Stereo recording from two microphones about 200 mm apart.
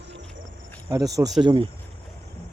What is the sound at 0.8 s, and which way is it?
Speech, 20° right (ahead or behind).